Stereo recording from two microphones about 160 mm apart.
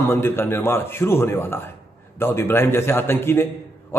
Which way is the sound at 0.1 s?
15° left (ahead or behind).